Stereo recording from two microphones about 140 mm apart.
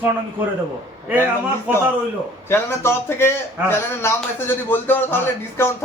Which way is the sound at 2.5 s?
15° left (ahead or behind).